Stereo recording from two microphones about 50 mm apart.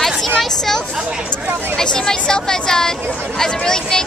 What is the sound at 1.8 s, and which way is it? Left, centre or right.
Speech, centre.